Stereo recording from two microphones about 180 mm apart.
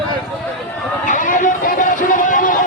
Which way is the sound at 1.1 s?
45° left (ahead or behind).